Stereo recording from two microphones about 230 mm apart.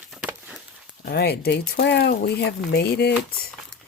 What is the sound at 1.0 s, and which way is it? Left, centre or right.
Speech, left.